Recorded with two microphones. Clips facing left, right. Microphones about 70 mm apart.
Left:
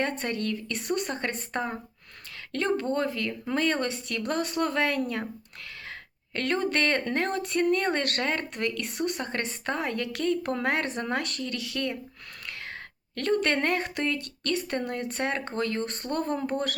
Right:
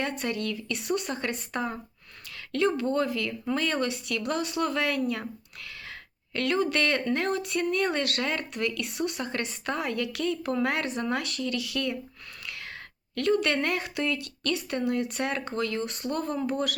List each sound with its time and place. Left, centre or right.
0.0 s speech: left
6.3 s speech: left
13.1 s speech: left